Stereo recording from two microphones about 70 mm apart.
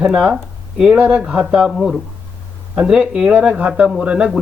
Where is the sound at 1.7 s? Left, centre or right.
Centre.